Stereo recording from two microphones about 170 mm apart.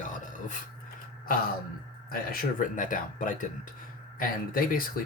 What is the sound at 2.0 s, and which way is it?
Speech, 60° left (ahead or behind).